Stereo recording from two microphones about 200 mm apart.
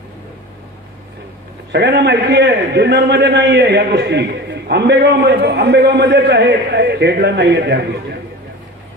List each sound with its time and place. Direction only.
1.7 s a man's voice: 55° right (ahead or behind)